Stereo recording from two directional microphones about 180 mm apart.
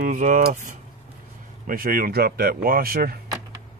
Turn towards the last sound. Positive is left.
turn(degrees=-55)  # may be behind; listen again after turning